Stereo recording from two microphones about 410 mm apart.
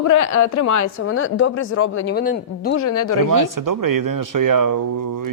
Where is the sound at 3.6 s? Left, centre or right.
Right.